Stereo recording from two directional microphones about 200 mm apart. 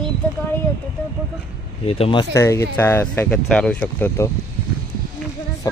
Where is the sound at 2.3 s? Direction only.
15° left (ahead or behind).